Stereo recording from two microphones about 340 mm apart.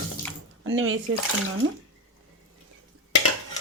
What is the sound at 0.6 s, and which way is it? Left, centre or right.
Speech, right.